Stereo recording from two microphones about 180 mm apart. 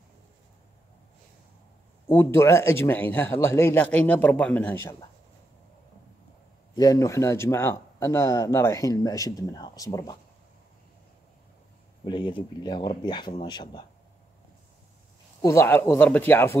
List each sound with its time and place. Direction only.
2.0 s speech: 15° left (ahead or behind)
6.7 s speech: 20° left (ahead or behind)
12.1 s speech: 25° left (ahead or behind)
15.4 s speech: 15° left (ahead or behind)